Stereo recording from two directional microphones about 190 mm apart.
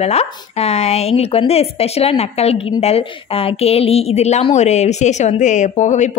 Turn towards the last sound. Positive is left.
turn(degrees=40)  # may be behind; listen again after turning